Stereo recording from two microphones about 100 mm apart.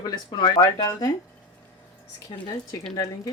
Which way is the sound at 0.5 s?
35° left (ahead or behind).